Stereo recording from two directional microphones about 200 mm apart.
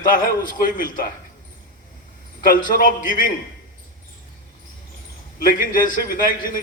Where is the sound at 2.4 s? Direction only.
45° left (ahead or behind).